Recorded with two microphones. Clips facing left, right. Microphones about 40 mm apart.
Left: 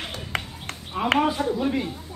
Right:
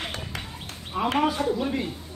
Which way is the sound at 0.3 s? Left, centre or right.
Left.